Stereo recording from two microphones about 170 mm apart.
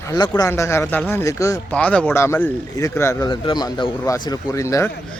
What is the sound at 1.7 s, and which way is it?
Speech, 5° left (ahead or behind).